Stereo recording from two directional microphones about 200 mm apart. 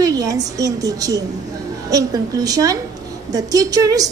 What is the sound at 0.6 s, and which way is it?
A woman's voice, 15° right (ahead or behind).